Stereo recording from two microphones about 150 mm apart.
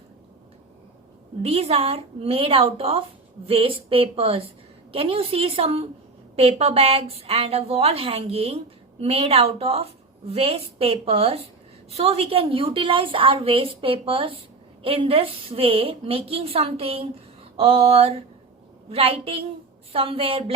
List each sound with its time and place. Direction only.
1.5 s a woman's voice: 40° right (ahead or behind)